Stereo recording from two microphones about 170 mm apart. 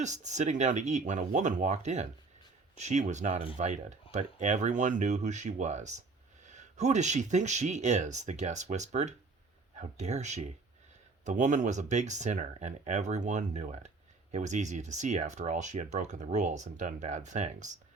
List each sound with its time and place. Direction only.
0.0 s speech: 45° right (ahead or behind)